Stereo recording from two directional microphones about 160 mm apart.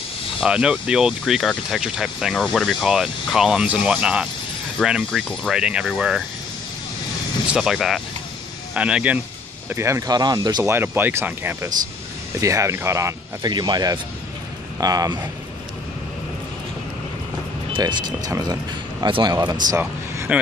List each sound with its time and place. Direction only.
0.4 s speech: 5° right (ahead or behind)
7.5 s speech: centre (ahead or behind); by 10.6 s 25° right (ahead or behind)
10.6 s speech: 15° right (ahead or behind)
17.7 s speech: 30° right (ahead or behind)
19.7 s a sound: 15° right (ahead or behind)